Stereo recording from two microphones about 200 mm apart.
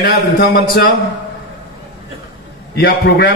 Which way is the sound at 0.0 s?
55° left (ahead or behind).